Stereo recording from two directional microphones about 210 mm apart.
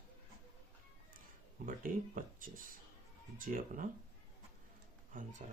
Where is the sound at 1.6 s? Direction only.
40° right (ahead or behind).